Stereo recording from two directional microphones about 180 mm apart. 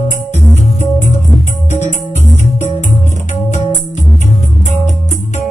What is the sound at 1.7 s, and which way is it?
Music, 40° left (ahead or behind).